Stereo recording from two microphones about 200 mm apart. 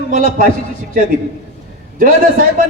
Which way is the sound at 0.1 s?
45° right (ahead or behind).